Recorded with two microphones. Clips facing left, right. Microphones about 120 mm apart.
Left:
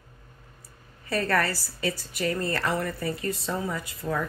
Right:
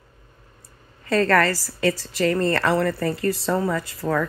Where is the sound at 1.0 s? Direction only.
90° right.